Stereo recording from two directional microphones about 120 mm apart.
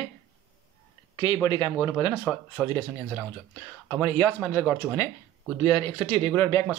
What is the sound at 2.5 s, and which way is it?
Speech, 20° left (ahead or behind).